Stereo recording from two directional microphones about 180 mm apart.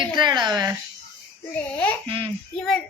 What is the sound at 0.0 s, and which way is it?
Speech, 25° right (ahead or behind).